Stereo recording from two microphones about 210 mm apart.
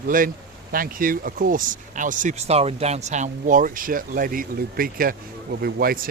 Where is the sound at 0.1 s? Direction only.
40° right (ahead or behind).